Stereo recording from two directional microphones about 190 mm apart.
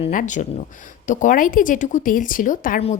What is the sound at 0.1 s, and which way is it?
A woman's voice, 45° left (ahead or behind).